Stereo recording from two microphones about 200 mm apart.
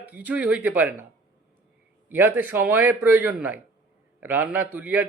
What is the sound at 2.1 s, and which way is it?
Speech, 10° right (ahead or behind).